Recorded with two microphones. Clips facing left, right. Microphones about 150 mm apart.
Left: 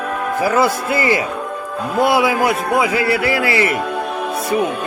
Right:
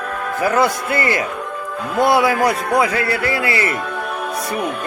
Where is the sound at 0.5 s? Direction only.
25° left (ahead or behind).